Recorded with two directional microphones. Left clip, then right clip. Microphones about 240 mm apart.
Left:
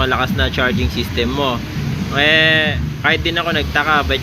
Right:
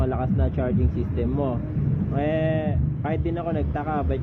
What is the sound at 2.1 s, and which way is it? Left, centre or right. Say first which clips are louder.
Speech: left 13 dB; centre.